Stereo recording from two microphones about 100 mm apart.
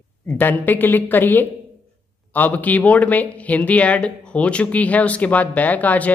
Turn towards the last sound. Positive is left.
turn(degrees=15)  # may be behind; listen again after turning